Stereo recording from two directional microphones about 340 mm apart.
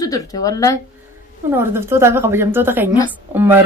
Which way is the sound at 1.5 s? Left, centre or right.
Centre.